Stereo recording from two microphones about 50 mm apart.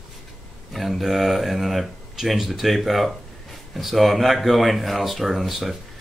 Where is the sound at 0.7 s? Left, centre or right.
Centre.